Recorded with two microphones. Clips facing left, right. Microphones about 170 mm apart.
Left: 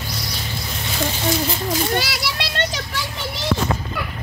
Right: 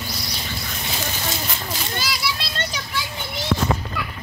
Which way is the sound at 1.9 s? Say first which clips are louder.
Left 4 dB; 70° left (ahead or behind).